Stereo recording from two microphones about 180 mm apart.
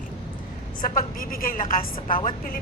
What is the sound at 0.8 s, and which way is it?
A woman's voice, 50° left (ahead or behind).